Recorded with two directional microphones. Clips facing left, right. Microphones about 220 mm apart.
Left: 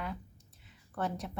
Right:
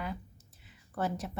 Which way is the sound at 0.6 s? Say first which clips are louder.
Right 2 dB; 5° right (ahead or behind).